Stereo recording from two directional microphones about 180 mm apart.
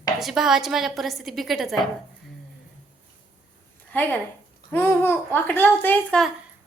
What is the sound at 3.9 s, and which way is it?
A child's voice, 10° left (ahead or behind).